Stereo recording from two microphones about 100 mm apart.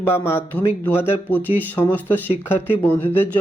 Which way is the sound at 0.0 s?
25° left (ahead or behind).